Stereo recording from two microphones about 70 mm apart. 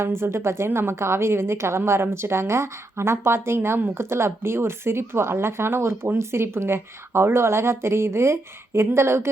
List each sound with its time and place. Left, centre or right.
0.0 s a woman's voice: right